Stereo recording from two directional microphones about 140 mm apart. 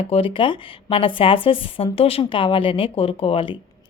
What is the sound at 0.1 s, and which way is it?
Speech, 40° left (ahead or behind).